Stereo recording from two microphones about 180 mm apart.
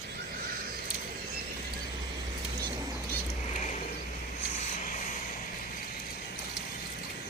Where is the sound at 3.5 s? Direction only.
40° left (ahead or behind).